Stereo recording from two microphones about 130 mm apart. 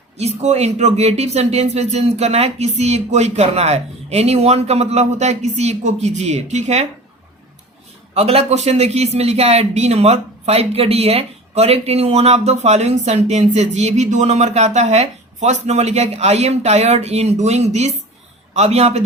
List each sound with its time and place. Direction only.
0.2 s a man's voice: 55° right (ahead or behind)
8.1 s a man's voice: 50° right (ahead or behind)